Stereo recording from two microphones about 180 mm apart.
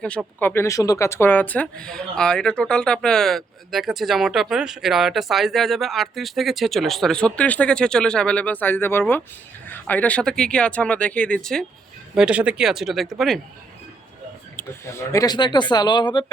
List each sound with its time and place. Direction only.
0.3 s speech: 10° left (ahead or behind)
14.5 s speech: 15° left (ahead or behind)